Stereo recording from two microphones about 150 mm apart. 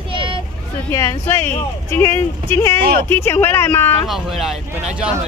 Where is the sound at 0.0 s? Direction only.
35° right (ahead or behind).